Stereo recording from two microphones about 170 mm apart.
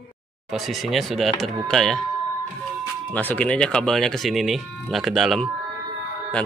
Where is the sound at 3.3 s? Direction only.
5° left (ahead or behind).